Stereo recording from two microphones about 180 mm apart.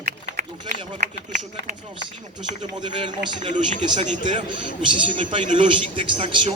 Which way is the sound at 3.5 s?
40° right (ahead or behind).